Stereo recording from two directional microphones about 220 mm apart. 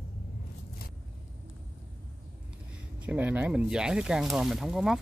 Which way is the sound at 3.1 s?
5° right (ahead or behind).